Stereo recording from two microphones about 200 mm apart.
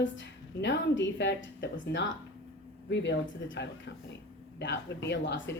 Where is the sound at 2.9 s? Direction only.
65° left (ahead or behind).